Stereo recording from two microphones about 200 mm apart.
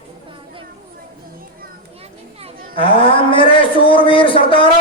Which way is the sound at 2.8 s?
25° left (ahead or behind).